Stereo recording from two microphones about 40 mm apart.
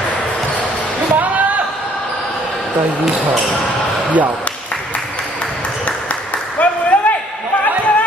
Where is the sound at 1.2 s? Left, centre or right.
Right.